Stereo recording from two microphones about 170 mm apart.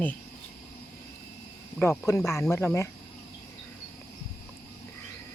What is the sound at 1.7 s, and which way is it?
Speech, 10° left (ahead or behind).